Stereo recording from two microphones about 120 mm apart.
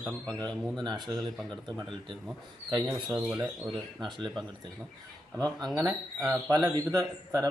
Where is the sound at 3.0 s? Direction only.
5° right (ahead or behind).